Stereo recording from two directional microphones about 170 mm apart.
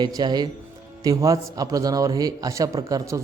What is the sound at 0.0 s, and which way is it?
A man's voice, 25° right (ahead or behind).